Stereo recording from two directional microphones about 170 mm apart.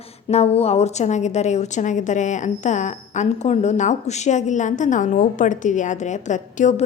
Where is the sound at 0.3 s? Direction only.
40° left (ahead or behind).